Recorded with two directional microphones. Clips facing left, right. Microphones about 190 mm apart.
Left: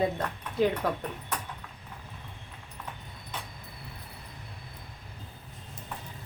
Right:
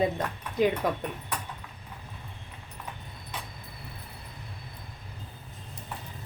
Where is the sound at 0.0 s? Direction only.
15° right (ahead or behind).